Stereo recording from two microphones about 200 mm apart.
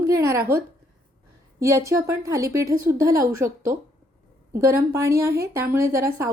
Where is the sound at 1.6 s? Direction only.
15° right (ahead or behind).